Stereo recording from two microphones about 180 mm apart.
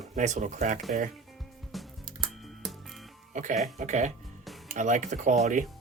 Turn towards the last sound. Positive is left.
turn(degrees=-45)  # may be behind; listen again after turning